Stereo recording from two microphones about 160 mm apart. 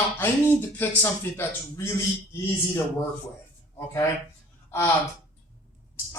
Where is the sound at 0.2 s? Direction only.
15° left (ahead or behind).